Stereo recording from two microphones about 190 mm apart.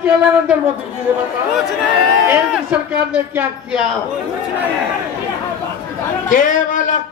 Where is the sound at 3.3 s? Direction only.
10° right (ahead or behind).